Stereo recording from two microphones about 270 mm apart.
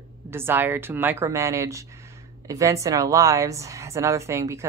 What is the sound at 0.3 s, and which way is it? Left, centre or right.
A woman's voice, centre.